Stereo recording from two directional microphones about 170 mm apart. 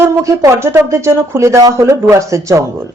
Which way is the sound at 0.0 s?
15° right (ahead or behind).